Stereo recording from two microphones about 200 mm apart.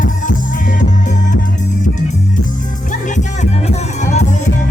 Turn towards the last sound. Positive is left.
turn(degrees=35)  # may be behind; listen again after turning